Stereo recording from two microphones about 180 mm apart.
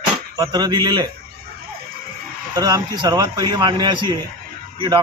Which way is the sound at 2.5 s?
20° right (ahead or behind).